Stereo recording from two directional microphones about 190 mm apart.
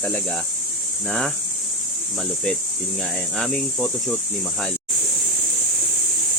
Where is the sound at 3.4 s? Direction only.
Centre (ahead or behind).